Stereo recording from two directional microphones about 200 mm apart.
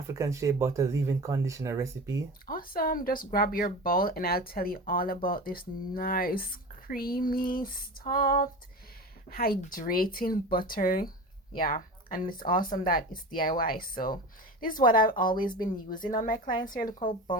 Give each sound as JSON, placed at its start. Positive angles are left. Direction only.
{"t": 0.1, "sound": "speech", "side_deg": -15}
{"t": 2.5, "sound": "speech", "side_deg": 45}